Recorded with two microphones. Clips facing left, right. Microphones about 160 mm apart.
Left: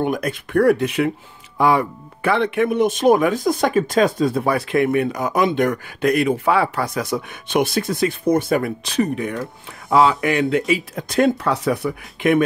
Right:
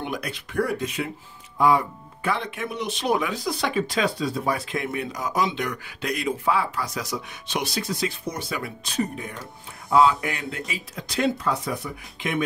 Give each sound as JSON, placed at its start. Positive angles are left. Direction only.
{"t": 0.0, "sound": "speech", "side_deg": 50}
{"t": 8.8, "sound": "speech", "side_deg": 90}
{"t": 11.0, "sound": "speech", "side_deg": 50}
{"t": 11.4, "sound": "speech", "side_deg": 70}